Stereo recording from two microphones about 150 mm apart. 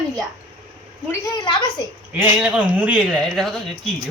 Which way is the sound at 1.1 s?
25° left (ahead or behind).